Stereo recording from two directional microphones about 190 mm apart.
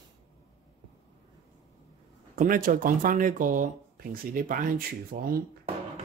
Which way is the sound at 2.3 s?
45° right (ahead or behind).